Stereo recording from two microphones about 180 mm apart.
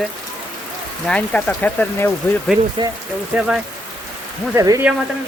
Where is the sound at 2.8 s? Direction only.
25° right (ahead or behind).